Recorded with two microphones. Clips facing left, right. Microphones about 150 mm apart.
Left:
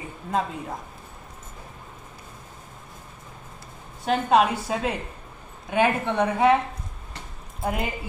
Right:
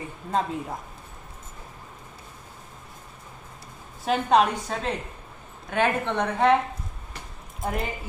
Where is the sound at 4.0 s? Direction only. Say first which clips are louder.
Left 1 dB; centre (ahead or behind).